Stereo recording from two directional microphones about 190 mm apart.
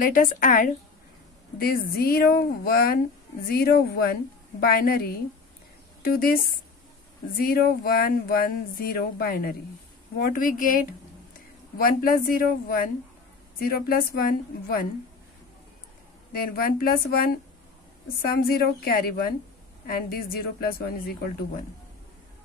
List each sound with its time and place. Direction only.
0.0 s speech: 45° left (ahead or behind)
6.1 s speech: 50° left (ahead or behind)
16.5 s speech: 55° left (ahead or behind)